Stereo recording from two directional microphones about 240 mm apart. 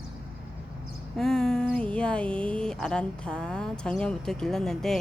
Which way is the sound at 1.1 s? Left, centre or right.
Centre.